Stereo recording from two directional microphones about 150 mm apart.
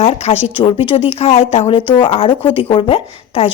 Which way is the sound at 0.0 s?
40° left (ahead or behind).